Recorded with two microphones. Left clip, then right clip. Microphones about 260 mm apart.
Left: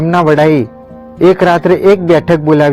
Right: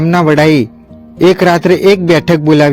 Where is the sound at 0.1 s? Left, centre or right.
Right.